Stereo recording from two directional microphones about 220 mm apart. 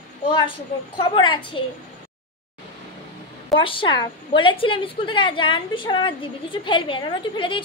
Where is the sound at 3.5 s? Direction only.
25° left (ahead or behind).